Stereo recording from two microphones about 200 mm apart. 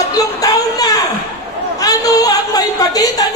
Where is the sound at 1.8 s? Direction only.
20° left (ahead or behind).